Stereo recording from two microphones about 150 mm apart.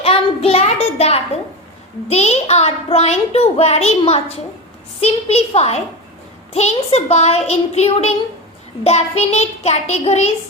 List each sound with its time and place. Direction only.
0.0 s child singing: 40° left (ahead or behind)
2.0 s a child's voice: 45° left (ahead or behind)